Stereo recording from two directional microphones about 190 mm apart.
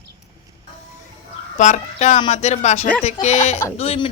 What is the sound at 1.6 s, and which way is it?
Speech, 40° left (ahead or behind).